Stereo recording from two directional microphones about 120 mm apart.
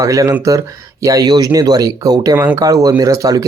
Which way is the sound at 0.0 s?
30° right (ahead or behind).